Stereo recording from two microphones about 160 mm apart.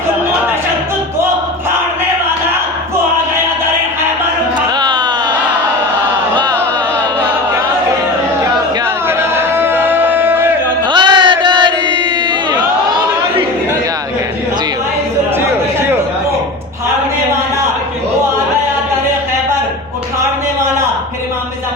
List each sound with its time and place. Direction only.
4.8 s music: 25° right (ahead or behind)
9.0 s a sound: 15° right (ahead or behind)
10.8 s chant: 30° right (ahead or behind)